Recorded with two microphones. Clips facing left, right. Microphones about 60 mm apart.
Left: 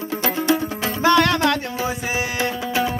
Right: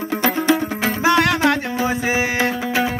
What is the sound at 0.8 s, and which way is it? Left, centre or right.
Music, centre.